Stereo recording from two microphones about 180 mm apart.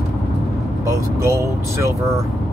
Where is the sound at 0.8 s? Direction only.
15° right (ahead or behind).